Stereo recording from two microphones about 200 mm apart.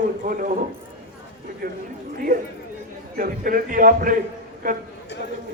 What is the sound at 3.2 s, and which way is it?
A man's voice, 45° right (ahead or behind).